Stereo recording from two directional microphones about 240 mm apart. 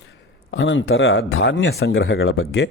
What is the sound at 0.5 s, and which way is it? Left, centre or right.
Speech, left.